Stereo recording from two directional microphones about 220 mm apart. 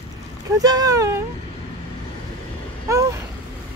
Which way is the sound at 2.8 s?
15° right (ahead or behind).